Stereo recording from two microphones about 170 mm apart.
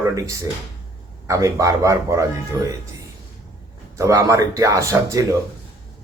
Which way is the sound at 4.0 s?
20° right (ahead or behind).